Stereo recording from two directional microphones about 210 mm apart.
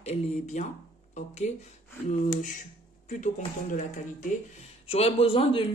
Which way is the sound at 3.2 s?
35° left (ahead or behind).